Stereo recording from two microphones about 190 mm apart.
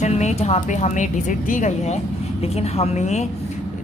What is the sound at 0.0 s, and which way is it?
A woman's voice, 35° left (ahead or behind).